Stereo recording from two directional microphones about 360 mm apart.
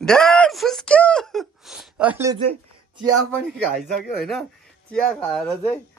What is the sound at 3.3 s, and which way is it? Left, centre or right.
Speech, centre.